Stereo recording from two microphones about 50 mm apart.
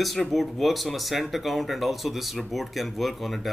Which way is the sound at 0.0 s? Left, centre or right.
Centre.